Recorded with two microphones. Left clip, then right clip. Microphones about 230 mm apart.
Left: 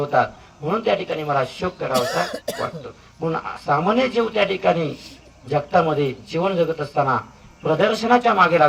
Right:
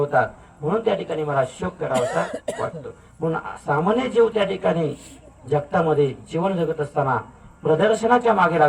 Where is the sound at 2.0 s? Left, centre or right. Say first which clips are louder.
Even; left.